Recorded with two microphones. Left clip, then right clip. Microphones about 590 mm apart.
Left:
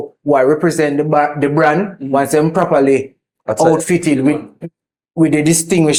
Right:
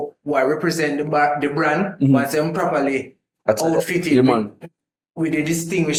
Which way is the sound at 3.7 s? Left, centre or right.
Left.